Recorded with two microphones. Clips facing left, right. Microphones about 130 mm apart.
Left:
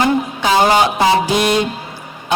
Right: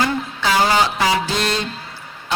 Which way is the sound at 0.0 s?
20° left (ahead or behind).